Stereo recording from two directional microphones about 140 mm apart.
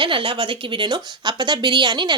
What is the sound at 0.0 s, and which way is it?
A woman's voice, 35° right (ahead or behind).